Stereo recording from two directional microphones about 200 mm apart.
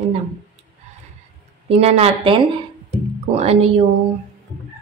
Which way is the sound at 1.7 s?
30° right (ahead or behind).